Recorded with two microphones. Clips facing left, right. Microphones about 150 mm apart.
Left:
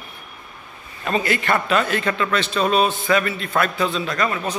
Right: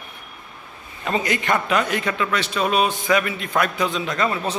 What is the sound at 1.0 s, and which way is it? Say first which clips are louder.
A man's voice: left 1 dB; 15° right (ahead or behind).